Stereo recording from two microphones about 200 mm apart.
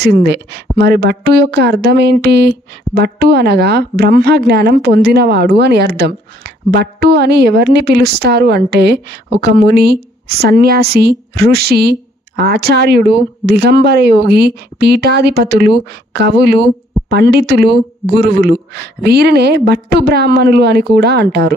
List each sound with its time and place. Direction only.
0.0 s a woman's voice: 55° right (ahead or behind)